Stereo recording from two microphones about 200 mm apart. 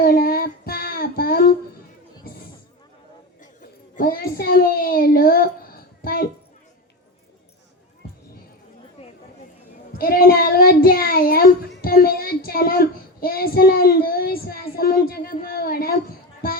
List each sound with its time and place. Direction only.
0.0 s child singing: 45° left (ahead or behind)
3.4 s a sound: 40° left (ahead or behind)
10.0 s child singing: 45° left (ahead or behind)